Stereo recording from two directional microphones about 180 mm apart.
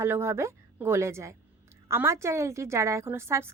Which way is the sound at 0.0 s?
15° right (ahead or behind).